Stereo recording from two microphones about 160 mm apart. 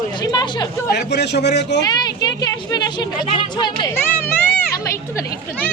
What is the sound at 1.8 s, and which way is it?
A woman's voice, 25° left (ahead or behind).